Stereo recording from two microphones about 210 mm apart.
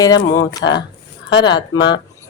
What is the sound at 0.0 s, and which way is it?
Speech, 20° left (ahead or behind).